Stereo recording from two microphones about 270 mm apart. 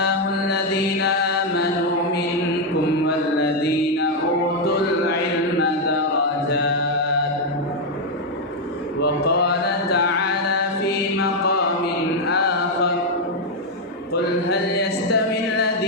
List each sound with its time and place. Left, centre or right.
0.0 s mantra: left
9.0 s mantra: left
11.2 s mantra: left
12.3 s chant: left
14.1 s mantra: left